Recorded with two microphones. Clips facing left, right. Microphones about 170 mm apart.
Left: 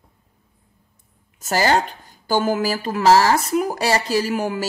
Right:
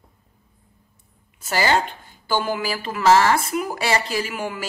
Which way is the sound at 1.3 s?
45° left (ahead or behind).